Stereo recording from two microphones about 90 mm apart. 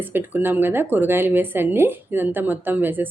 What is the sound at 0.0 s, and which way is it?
Speech, 25° right (ahead or behind).